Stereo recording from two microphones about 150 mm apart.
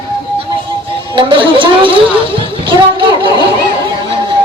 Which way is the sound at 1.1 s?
35° right (ahead or behind).